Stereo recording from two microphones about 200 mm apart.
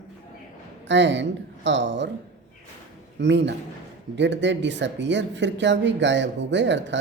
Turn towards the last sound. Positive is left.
turn(degrees=-65)  # may be behind; listen again after turning